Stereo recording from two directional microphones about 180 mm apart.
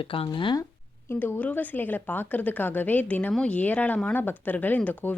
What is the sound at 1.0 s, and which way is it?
Speech, 10° left (ahead or behind).